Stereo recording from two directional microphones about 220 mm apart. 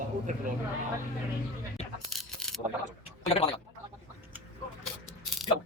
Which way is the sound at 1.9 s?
Centre (ahead or behind).